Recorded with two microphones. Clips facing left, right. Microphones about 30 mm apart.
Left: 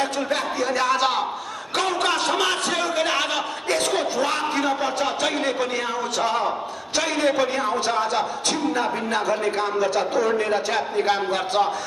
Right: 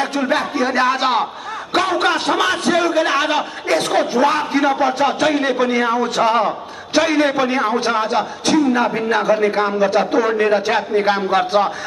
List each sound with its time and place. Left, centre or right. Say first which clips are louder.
0.2 s a man's voice: right 6 dB; right
1.7 s a sound: right 6 dB; right
3.9 s a man's voice: right 7 dB; right
8.2 s vocal music: right 7 dB; centre
8.8 s a man's voice: right 7 dB; right